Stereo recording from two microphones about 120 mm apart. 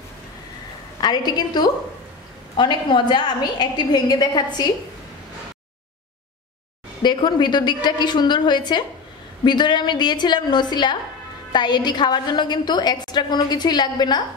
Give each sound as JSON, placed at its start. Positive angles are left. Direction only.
{"t": 1.0, "sound": "a woman's voice", "side_deg": 35}
{"t": 7.0, "sound": "a woman's voice", "side_deg": 40}